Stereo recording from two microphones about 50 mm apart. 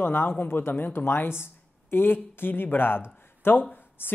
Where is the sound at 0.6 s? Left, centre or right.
Left.